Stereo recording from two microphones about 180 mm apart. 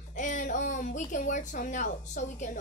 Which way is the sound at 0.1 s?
45° left (ahead or behind).